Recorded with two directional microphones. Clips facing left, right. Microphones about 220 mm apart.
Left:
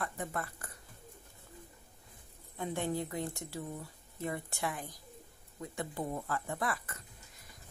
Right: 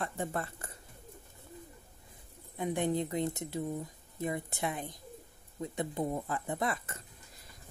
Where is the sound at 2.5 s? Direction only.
15° right (ahead or behind).